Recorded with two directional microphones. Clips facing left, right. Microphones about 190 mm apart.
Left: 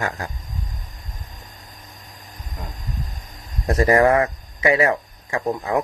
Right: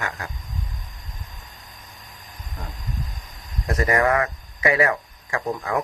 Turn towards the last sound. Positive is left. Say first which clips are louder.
# left 3 dB
turn(degrees=20)  # may be behind; listen again after turning